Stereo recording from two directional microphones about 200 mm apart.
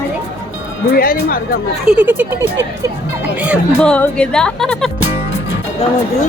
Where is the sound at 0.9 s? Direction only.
50° left (ahead or behind).